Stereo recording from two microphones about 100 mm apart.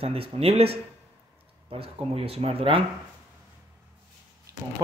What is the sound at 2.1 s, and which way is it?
Speech, 80° right.